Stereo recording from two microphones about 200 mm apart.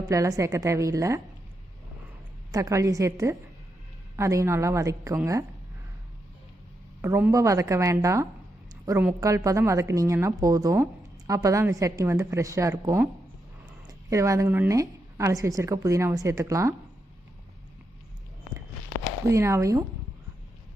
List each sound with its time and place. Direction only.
0.1 s a woman's voice: 15° right (ahead or behind)
2.5 s a woman's voice: 15° right (ahead or behind)
7.0 s a woman's voice: 10° right (ahead or behind)
8.7 s a sound: 15° right (ahead or behind)
9.2 s a woman's voice: 15° right (ahead or behind)
19.3 s a woman's voice: 15° right (ahead or behind)